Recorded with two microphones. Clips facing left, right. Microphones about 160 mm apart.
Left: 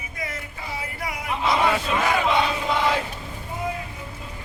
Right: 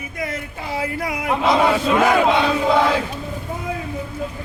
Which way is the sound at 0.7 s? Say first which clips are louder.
Right 8 dB; 90° right.